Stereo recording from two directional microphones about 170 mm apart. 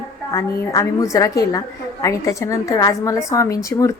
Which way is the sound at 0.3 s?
20° left (ahead or behind).